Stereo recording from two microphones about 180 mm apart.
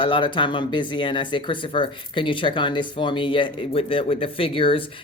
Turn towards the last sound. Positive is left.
turn(degrees=30)  # may be behind; listen again after turning